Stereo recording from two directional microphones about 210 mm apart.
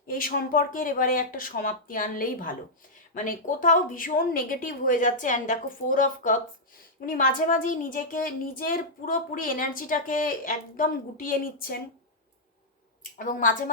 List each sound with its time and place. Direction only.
0.1 s a woman's voice: 40° left (ahead or behind)
13.0 s a woman's voice: 40° left (ahead or behind)